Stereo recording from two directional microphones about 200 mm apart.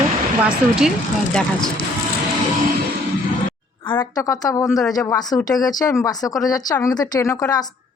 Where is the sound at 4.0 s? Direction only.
15° left (ahead or behind).